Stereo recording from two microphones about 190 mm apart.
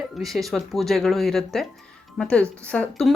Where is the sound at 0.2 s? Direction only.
Centre (ahead or behind).